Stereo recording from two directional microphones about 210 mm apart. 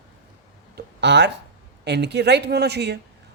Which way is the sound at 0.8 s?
55° right (ahead or behind).